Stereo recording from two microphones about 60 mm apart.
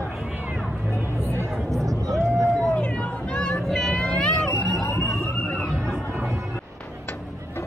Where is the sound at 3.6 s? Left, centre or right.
Centre.